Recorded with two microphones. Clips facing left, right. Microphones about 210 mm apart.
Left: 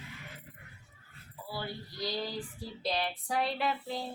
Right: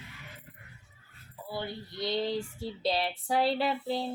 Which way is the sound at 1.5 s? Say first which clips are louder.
Right 3 dB; 20° right (ahead or behind).